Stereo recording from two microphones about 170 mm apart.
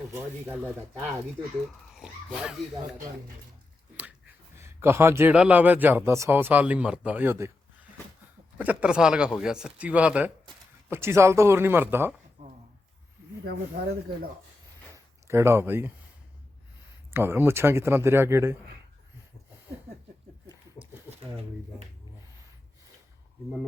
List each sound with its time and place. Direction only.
0.1 s a man's voice: 10° right (ahead or behind)
4.5 s a man's voice: 15° right (ahead or behind)
8.5 s a man's voice: 10° right (ahead or behind)
12.4 s a sound: 45° right (ahead or behind)
14.9 s a sound: 15° right (ahead or behind)
17.1 s a man's voice: 15° right (ahead or behind)